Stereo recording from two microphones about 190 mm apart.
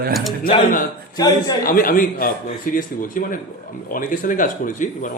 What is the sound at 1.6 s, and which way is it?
A man's voice, 50° left (ahead or behind).